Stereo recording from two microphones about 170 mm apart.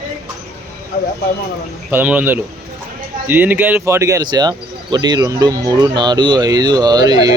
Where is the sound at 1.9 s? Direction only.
10° right (ahead or behind).